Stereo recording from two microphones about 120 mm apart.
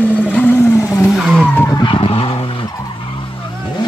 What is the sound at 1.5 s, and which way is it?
Vehicle, 25° left (ahead or behind).